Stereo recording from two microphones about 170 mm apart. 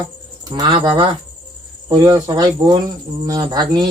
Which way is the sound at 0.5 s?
30° right (ahead or behind).